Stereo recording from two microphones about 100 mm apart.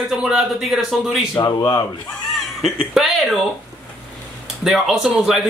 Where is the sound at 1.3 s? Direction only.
40° left (ahead or behind).